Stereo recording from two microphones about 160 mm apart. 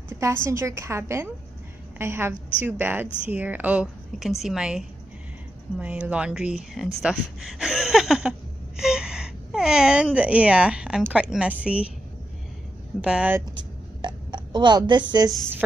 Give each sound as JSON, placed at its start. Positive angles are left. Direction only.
{"t": 0.2, "sound": "a woman's voice", "side_deg": -15}
{"t": 13.0, "sound": "speech", "side_deg": -5}
{"t": 14.0, "sound": "a sound", "side_deg": -30}